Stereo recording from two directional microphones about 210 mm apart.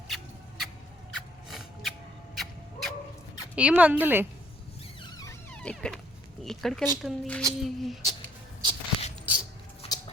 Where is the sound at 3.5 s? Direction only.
5° right (ahead or behind).